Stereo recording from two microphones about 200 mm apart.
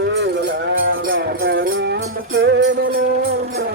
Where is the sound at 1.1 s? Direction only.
55° right (ahead or behind).